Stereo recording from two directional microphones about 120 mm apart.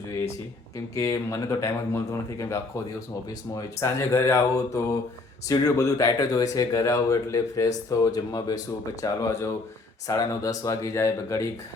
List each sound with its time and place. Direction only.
0.9 s speech: 25° left (ahead or behind)
3.8 s speech: 25° left (ahead or behind)